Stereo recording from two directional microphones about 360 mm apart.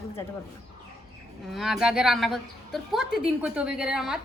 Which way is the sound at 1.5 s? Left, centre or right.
Centre.